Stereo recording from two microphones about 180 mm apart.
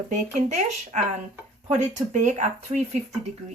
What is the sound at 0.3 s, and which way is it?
Speech, 40° right (ahead or behind).